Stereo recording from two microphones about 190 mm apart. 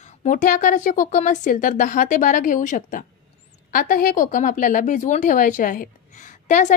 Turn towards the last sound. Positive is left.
turn(degrees=40)  # may be behind; listen again after turning